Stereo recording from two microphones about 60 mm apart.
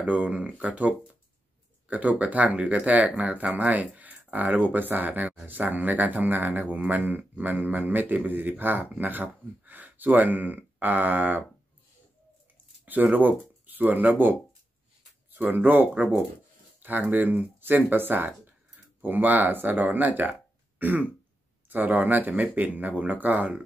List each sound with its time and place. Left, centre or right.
0.0 s speech: right
12.8 s speech: right
15.3 s speech: right
17.1 s speech: right